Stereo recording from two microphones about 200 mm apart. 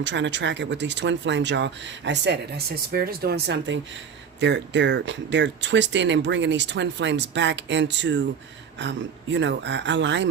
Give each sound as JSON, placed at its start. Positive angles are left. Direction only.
{"t": 0.0, "sound": "speech", "side_deg": -65}